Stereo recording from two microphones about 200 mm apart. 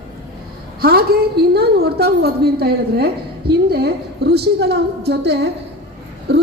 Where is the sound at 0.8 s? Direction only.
50° right (ahead or behind).